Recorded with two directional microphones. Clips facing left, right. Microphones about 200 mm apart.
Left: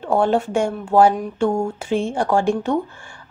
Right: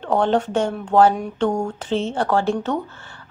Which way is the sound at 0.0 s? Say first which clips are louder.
Left 1 dB; 10° left (ahead or behind).